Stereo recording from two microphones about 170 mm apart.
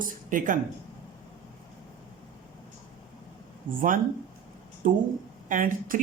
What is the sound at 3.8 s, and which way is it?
Speech, 55° right (ahead or behind).